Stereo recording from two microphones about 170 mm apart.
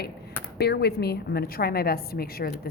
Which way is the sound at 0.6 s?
70° left (ahead or behind).